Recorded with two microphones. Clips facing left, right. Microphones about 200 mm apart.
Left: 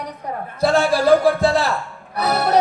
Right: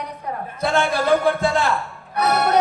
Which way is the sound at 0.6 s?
30° left (ahead or behind).